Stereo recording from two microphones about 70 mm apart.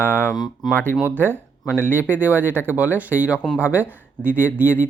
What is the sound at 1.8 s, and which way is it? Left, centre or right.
Speech, right.